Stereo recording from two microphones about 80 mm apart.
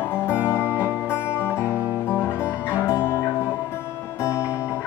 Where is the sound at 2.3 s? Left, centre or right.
Left.